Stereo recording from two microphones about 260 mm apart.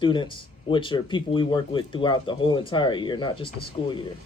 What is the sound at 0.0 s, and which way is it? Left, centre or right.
Speech, centre.